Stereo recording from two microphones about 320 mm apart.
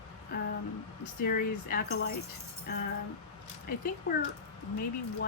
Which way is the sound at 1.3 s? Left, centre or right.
Left.